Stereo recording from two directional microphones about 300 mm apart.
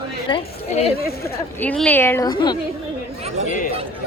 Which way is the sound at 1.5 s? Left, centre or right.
Centre.